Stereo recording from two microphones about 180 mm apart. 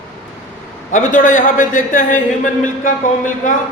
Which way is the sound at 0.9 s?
45° left (ahead or behind).